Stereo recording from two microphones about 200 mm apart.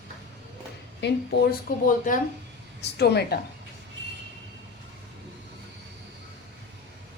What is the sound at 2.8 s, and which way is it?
Speech, 55° left (ahead or behind).